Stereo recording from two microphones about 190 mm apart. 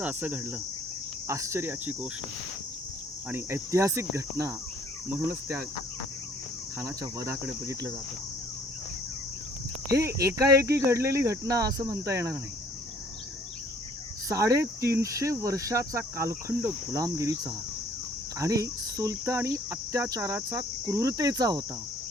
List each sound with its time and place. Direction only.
0.0 s cricket: 10° right (ahead or behind)
3.2 s cricket: 10° right (ahead or behind)
6.7 s cricket: 15° right (ahead or behind)
9.9 s cricket: 15° right (ahead or behind)
14.3 s cricket: 15° right (ahead or behind)